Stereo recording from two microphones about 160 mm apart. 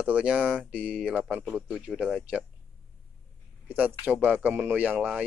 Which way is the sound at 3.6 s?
10° right (ahead or behind).